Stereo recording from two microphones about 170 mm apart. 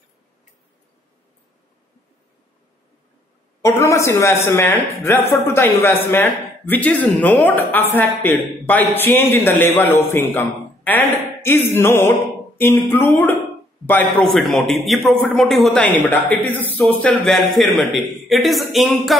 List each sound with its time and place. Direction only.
3.6 s a man's voice: 15° left (ahead or behind); by 19.1 s centre (ahead or behind)